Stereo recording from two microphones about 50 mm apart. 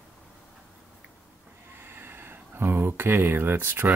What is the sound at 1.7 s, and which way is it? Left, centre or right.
Speech, right.